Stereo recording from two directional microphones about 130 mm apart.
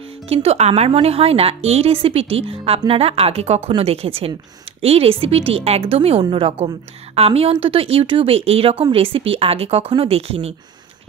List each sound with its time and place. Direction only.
0.3 s speech: 50° right (ahead or behind)